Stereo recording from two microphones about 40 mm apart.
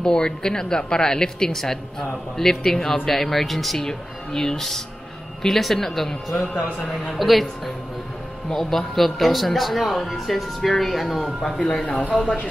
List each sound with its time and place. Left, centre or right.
0.0 s speech: centre
6.5 s a man's voice: centre
12.0 s speech: left